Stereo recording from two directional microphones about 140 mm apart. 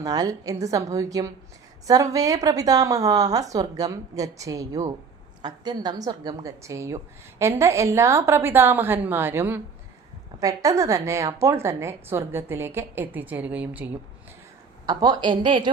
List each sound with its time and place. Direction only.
0.0 s a woman's voice: 25° right (ahead or behind); by 13.9 s 10° right (ahead or behind)
14.8 s a woman's voice: 30° right (ahead or behind)